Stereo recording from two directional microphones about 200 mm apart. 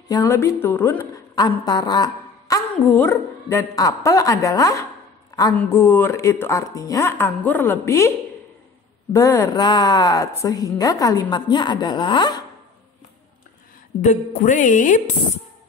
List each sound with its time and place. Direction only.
0.1 s a woman's voice: 15° left (ahead or behind)
9.1 s a woman's voice: 15° left (ahead or behind)
14.0 s music: 35° left (ahead or behind)